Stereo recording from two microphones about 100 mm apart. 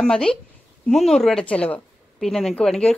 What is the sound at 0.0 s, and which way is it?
Speech, 5° left (ahead or behind).